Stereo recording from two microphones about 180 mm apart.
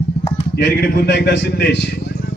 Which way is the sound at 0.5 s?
65° left (ahead or behind).